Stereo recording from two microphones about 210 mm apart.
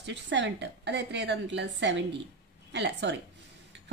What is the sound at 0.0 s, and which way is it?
A woman's voice, 55° right (ahead or behind).